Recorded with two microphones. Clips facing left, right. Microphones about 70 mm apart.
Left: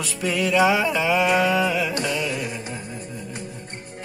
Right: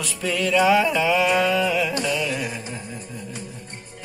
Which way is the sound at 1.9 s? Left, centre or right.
Left.